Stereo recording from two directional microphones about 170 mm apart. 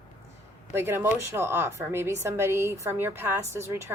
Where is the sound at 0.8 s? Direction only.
15° right (ahead or behind).